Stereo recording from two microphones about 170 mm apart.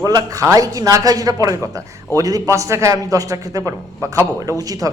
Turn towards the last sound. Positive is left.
turn(degrees=-20)  # may be behind; listen again after turning